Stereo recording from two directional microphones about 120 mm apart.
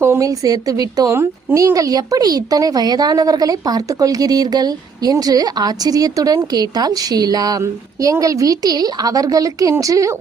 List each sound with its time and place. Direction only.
0.0 s a woman's voice: 25° right (ahead or behind)